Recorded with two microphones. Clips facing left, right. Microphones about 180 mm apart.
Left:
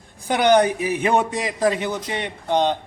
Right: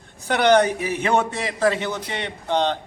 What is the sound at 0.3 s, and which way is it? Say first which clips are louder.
A man's voice: left 1 dB; 10° left (ahead or behind).